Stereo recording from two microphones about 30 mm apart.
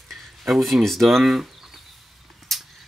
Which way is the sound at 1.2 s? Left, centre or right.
Centre.